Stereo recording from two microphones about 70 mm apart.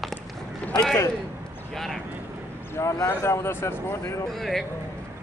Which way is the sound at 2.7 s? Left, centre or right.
Left.